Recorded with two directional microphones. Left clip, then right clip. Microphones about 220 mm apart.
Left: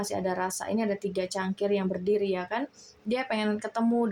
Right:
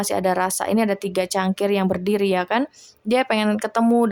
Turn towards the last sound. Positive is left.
turn(degrees=-30)  # may be behind; listen again after turning